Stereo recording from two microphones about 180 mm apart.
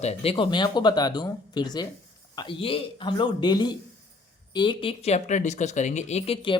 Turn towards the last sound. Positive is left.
turn(degrees=35)  # may be behind; listen again after turning